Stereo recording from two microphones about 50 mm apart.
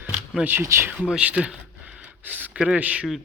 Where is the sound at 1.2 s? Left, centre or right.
Right.